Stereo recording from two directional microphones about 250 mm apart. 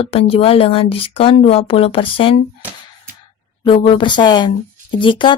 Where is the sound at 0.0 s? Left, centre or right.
Left.